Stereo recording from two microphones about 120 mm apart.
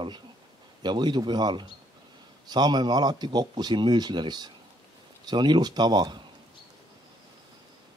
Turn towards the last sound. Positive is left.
turn(degrees=-35)  # may be behind; listen again after turning